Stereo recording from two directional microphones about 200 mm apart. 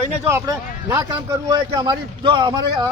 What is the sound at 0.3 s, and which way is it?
A man's voice, 15° right (ahead or behind).